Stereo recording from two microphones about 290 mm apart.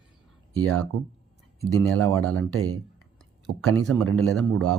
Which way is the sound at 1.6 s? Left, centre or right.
Right.